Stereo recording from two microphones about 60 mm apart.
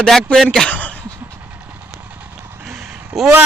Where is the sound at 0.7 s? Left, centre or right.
Left.